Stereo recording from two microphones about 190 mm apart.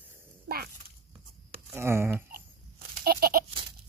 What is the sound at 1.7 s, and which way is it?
Speech, 15° right (ahead or behind).